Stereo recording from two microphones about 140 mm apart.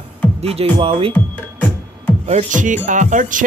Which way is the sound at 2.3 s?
60° right (ahead or behind).